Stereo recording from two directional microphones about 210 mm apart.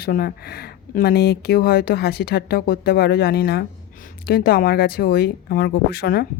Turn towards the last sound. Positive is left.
turn(degrees=45)  # may be behind; listen again after turning